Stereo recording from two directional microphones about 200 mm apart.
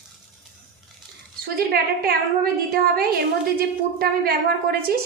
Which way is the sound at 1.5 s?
50° right (ahead or behind).